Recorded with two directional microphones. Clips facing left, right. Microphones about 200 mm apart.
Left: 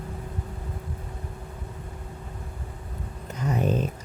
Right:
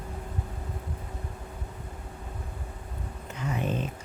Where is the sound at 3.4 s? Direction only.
40° left (ahead or behind).